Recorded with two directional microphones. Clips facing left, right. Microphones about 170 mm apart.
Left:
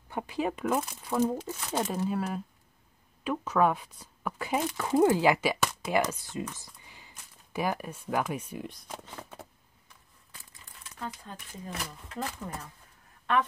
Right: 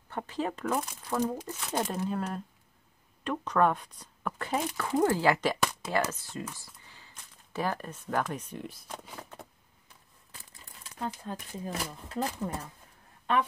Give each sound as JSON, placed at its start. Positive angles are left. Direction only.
{"t": 0.1, "sound": "speech", "side_deg": 10}
{"t": 8.6, "sound": "speech", "side_deg": -5}
{"t": 11.0, "sound": "speech", "side_deg": -30}